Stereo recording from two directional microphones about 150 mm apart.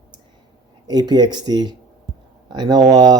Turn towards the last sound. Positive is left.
turn(degrees=-25)  # may be behind; listen again after turning